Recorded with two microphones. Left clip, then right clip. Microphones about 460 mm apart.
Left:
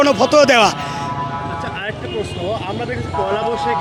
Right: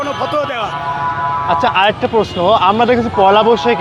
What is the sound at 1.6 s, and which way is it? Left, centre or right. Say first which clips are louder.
Speech: right 13 dB; right.